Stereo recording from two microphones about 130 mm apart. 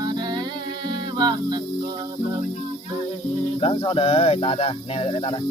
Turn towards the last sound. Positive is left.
turn(degrees=45)  # may be behind; listen again after turning